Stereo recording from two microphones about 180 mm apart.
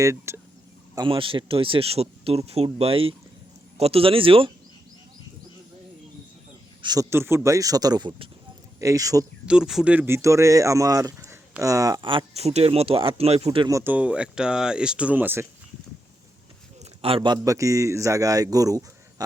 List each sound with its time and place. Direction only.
0.0 s speech: 15° right (ahead or behind)
0.9 s a man's voice: 30° right (ahead or behind)
6.8 s a man's voice: 20° right (ahead or behind)
9.5 s speech: 5° right (ahead or behind); by 13.7 s 35° right (ahead or behind)
13.7 s speech: 15° right (ahead or behind)
17.0 s a man's voice: 30° right (ahead or behind)